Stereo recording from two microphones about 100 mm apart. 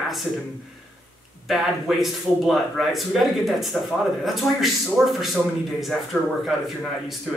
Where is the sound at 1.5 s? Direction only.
Centre (ahead or behind).